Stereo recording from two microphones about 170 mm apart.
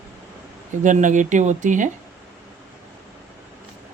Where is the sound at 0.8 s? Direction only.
45° right (ahead or behind).